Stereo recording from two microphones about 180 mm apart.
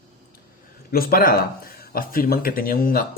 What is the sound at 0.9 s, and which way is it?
Speech, 55° left (ahead or behind).